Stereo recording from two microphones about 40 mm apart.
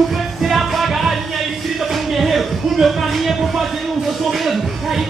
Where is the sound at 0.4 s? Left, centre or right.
Centre.